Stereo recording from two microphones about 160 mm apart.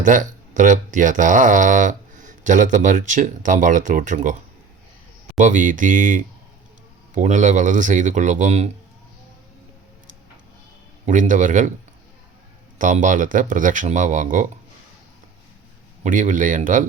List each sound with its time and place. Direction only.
0.0 s speech: 55° right (ahead or behind)
11.0 s speech: 55° right (ahead or behind)
12.8 s speech: 50° right (ahead or behind)
16.0 s speech: 55° right (ahead or behind)